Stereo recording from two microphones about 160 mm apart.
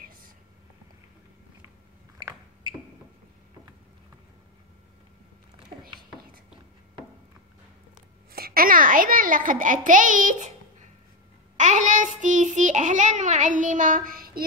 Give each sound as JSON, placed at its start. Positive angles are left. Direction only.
{"t": 0.0, "sound": "whispering", "side_deg": -65}
{"t": 8.3, "sound": "a child's voice", "side_deg": -70}
{"t": 11.5, "sound": "child singing", "side_deg": -50}